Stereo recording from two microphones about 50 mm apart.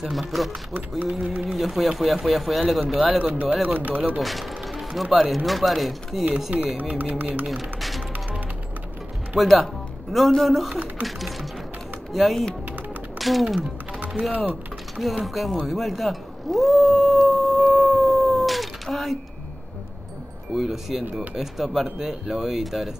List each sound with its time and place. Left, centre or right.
0.0 s speech: centre
3.2 s speech: right
3.6 s a sound: right
4.2 s music: centre
5.1 s speech: centre
6.8 s a sound: right
7.4 s speech: centre
9.4 s speech: centre
13.6 s music: right
14.3 s speech: right
15.0 s speech: centre
15.6 s a sound: centre
20.5 s speech: centre